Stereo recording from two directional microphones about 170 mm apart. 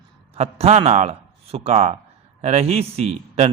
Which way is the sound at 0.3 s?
40° right (ahead or behind).